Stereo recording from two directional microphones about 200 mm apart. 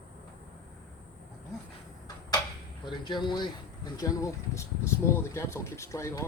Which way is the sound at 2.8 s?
25° left (ahead or behind).